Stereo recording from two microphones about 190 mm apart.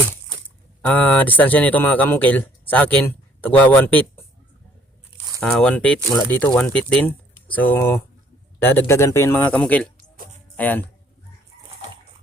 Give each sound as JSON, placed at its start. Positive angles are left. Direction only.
{"t": 0.8, "sound": "speech", "side_deg": 10}
{"t": 5.4, "sound": "speech", "side_deg": 5}